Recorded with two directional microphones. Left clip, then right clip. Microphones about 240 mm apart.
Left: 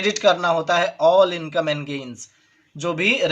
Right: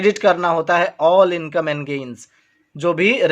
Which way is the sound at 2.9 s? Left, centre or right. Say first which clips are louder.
Right 3 dB; right.